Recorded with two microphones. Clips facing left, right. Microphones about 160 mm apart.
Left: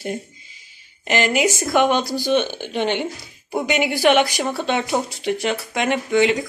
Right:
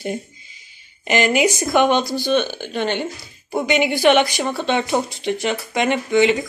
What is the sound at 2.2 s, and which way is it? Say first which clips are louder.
Speech: even; 15° left (ahead or behind).